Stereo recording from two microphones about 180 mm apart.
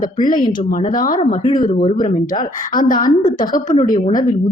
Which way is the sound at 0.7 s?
45° left (ahead or behind).